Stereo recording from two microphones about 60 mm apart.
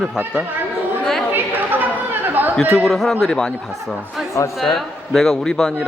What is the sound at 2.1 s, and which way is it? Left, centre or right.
Chatter, right.